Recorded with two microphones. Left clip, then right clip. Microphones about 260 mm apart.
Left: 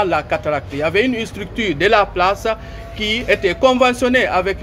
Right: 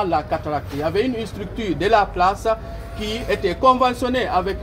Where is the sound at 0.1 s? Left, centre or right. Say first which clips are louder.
Left 3 dB; left.